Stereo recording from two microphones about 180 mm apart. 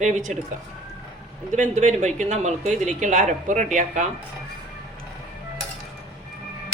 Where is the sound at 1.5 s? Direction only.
40° right (ahead or behind).